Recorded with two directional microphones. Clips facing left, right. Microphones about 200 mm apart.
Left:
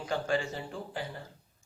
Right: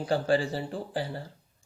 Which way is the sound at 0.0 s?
35° right (ahead or behind).